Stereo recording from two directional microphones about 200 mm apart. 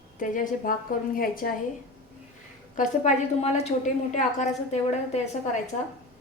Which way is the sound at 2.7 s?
35° left (ahead or behind).